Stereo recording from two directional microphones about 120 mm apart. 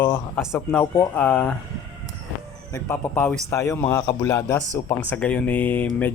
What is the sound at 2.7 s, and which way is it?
A man's voice, 20° left (ahead or behind).